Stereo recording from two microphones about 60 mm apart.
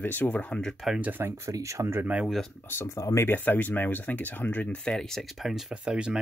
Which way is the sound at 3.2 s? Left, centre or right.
Left.